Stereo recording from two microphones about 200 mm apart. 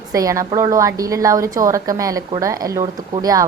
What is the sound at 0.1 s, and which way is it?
A woman's voice, 15° right (ahead or behind).